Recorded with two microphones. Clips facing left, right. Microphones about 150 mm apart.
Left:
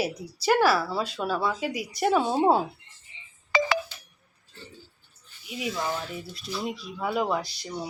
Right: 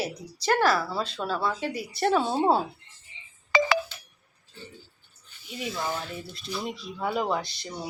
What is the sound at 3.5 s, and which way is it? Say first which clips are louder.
Ringtone: right 1 dB; 70° right (ahead or behind).